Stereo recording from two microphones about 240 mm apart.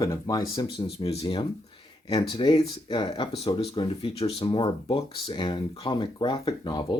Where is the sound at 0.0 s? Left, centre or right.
Centre.